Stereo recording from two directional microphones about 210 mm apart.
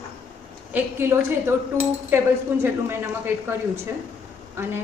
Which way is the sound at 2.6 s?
10° right (ahead or behind).